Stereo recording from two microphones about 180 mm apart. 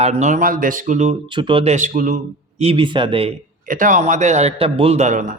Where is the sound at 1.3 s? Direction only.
25° right (ahead or behind); by 2.1 s 45° right (ahead or behind).